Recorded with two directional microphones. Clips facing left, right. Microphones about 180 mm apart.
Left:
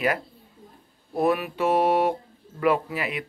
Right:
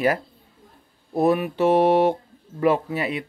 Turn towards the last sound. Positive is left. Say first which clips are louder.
# right 3 dB
turn(degrees=-25)  # may be behind; listen again after turning